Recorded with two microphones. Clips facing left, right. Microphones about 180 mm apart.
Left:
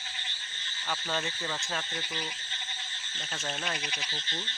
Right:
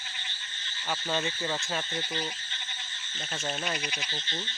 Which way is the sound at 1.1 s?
10° right (ahead or behind).